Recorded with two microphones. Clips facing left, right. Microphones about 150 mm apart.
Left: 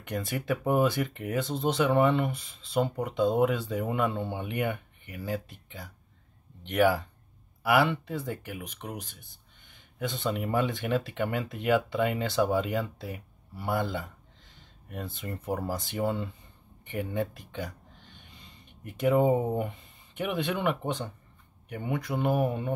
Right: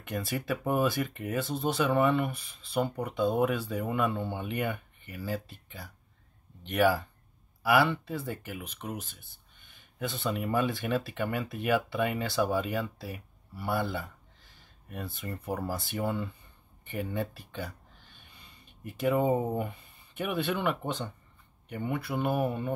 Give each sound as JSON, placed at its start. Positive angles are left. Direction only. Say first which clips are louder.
{"t": 0.0, "sound": "speech", "louder": "left 1 dB", "side_deg": 20}